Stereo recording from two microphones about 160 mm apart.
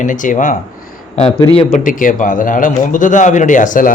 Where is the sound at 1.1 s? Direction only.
40° left (ahead or behind).